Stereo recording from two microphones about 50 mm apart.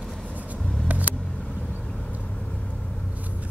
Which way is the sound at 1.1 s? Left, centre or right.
Left.